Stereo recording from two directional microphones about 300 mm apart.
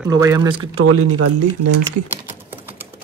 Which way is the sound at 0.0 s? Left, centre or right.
Centre.